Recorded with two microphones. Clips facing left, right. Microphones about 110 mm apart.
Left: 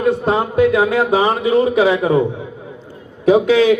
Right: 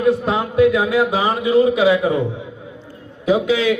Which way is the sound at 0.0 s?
40° left (ahead or behind).